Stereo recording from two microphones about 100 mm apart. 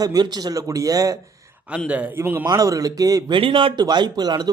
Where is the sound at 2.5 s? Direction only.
35° right (ahead or behind).